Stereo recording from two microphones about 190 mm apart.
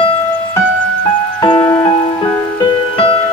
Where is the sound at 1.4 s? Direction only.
20° left (ahead or behind).